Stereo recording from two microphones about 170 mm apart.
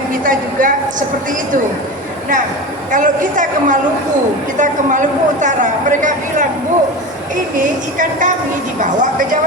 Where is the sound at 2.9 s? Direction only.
50° right (ahead or behind).